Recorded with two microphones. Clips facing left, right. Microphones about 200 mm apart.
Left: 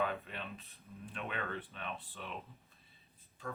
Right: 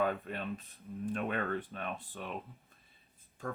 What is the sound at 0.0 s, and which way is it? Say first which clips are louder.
Speech: right 4 dB; 45° right (ahead or behind).